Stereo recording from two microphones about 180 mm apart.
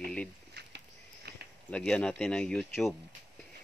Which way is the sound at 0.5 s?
65° right (ahead or behind).